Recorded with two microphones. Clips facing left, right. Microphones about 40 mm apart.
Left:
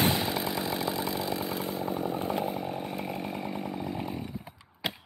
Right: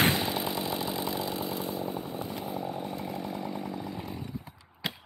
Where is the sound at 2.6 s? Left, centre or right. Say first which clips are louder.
Left 1 dB; left.